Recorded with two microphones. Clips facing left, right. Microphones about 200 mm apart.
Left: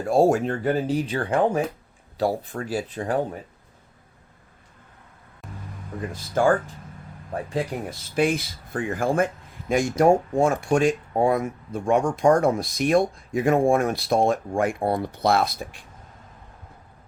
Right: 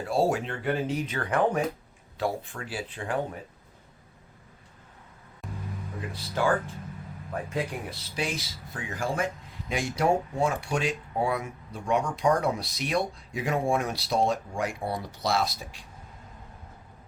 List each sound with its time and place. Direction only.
0.0 s speech: 45° left (ahead or behind)
5.4 s vehicle: centre (ahead or behind)
6.0 s speech: 45° left (ahead or behind)
7.3 s speech: 35° left (ahead or behind)
7.9 s speech: 55° left (ahead or behind)